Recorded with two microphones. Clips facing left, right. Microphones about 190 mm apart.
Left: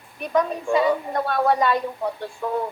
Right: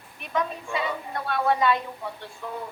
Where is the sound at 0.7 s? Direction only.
45° left (ahead or behind).